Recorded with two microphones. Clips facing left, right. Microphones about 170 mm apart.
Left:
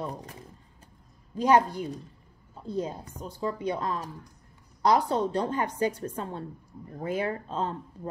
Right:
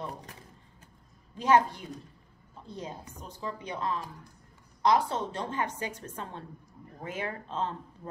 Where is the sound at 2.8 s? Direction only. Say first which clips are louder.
Left 8 dB; 35° left (ahead or behind).